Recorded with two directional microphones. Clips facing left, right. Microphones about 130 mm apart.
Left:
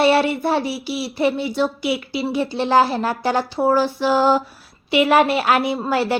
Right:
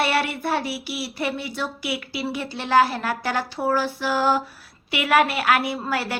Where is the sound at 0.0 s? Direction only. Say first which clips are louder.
Left 7 dB; 25° left (ahead or behind).